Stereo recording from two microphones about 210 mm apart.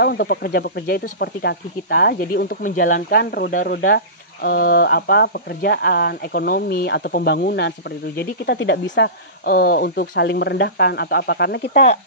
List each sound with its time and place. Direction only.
0.0 s speech: 50° left (ahead or behind)